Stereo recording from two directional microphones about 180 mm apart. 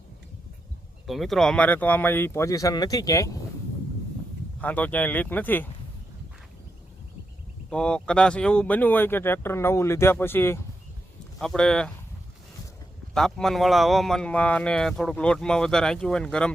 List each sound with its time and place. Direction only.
1.0 s speech: centre (ahead or behind); by 3.3 s 20° left (ahead or behind)
4.6 s speech: 10° left (ahead or behind)
7.7 s a man's voice: 5° left (ahead or behind)
13.1 s a man's voice: 5° left (ahead or behind)